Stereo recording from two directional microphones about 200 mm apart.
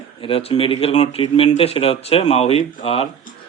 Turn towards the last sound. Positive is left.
turn(degrees=30)  # may be behind; listen again after turning